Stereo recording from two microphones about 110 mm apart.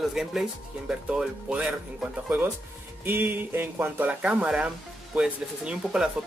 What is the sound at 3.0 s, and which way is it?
Speech, 20° right (ahead or behind).